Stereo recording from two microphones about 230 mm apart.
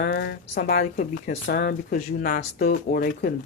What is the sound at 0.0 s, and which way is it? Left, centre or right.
Speech, left.